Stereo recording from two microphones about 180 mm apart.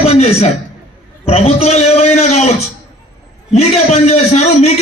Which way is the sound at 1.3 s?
35° left (ahead or behind).